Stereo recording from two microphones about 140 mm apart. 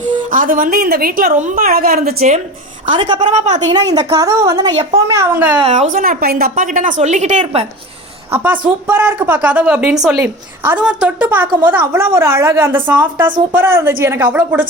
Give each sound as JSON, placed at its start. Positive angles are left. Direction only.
{"t": 0.0, "sound": "a woman's voice", "side_deg": -75}
{"t": 2.9, "sound": "a woman's voice", "side_deg": -35}
{"t": 3.2, "sound": "a woman's voice", "side_deg": -55}
{"t": 3.7, "sound": "a woman's voice", "side_deg": -25}
{"t": 5.7, "sound": "a woman's voice", "side_deg": -55}
{"t": 6.0, "sound": "a woman's voice", "side_deg": -90}
{"t": 8.3, "sound": "a woman's voice", "side_deg": -15}